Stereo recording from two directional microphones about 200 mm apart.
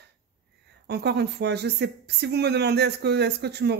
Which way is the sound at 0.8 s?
55° right (ahead or behind).